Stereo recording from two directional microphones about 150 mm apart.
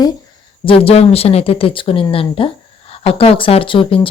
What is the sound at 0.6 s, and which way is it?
Speech, 40° left (ahead or behind).